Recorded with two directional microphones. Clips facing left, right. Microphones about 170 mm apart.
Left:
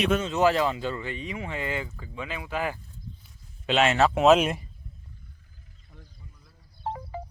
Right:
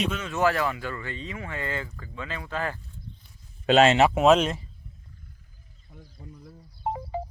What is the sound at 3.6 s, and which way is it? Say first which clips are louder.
Speech: right 5 dB; 40° right (ahead or behind).